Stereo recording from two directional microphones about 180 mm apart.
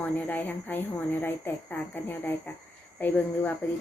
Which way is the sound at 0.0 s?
10° left (ahead or behind).